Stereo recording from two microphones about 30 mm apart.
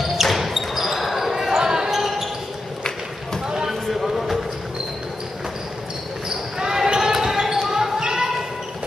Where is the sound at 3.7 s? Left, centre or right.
Centre.